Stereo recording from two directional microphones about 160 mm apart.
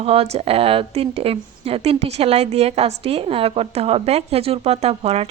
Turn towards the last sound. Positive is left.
turn(degrees=-40)  # may be behind; listen again after turning